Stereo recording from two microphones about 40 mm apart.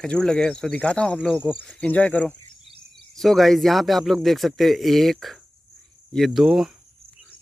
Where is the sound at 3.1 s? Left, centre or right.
Centre.